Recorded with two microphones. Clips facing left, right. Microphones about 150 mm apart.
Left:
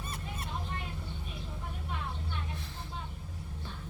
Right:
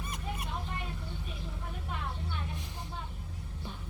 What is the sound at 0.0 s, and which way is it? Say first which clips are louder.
Vehicle: right 2 dB; 15° right (ahead or behind).